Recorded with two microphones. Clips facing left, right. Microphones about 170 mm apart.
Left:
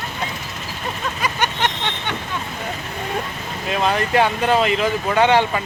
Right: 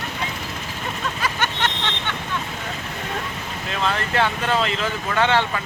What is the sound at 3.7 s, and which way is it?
Speech, 15° left (ahead or behind).